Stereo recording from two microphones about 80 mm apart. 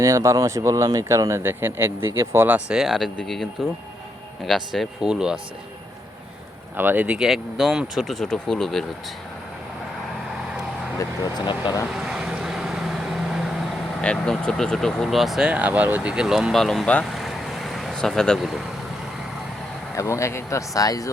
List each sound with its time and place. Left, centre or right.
0.0 s speech: right
2.7 s speech: centre
4.4 s speech: centre
6.7 s speech: right
7.2 s speech: centre
11.2 s speech: left
11.9 s vehicle: centre
14.2 s speech: centre
16.8 s speech: centre
17.1 s vehicle: centre
20.0 s speech: left